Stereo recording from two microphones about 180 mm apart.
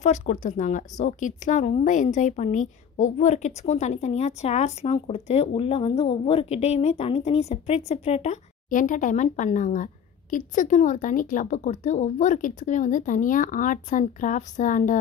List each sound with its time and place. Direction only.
0.0 s a woman's voice: 40° left (ahead or behind)